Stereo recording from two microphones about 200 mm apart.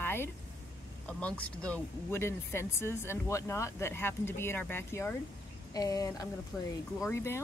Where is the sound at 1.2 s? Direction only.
5° left (ahead or behind).